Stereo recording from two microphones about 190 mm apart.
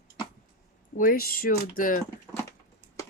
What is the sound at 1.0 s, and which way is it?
Speech, 50° left (ahead or behind).